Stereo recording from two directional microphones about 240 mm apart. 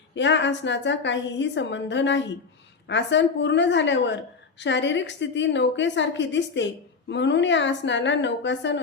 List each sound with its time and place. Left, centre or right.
0.1 s a woman's voice: left